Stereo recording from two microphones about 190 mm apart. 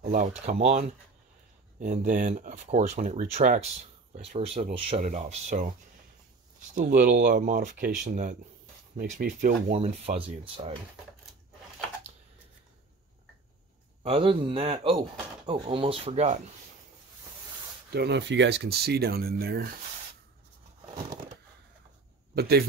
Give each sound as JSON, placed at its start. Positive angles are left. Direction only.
{"t": 0.1, "sound": "speech", "side_deg": -40}
{"t": 1.8, "sound": "speech", "side_deg": -45}
{"t": 6.7, "sound": "speech", "side_deg": -45}
{"t": 9.7, "sound": "speech", "side_deg": -35}
{"t": 14.0, "sound": "speech", "side_deg": -30}
{"t": 17.9, "sound": "speech", "side_deg": -60}
{"t": 22.3, "sound": "a man's voice", "side_deg": -55}